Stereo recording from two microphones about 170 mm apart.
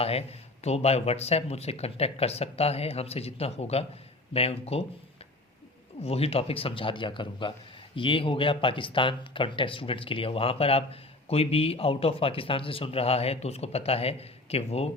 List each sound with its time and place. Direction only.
0.0 s speech: 35° left (ahead or behind)
6.0 s speech: 35° left (ahead or behind)